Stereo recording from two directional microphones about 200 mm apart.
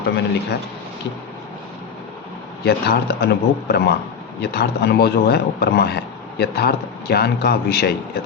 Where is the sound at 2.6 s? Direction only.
55° left (ahead or behind).